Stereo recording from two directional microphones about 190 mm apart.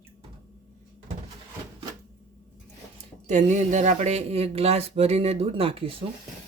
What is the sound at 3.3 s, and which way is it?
Speech, 40° right (ahead or behind).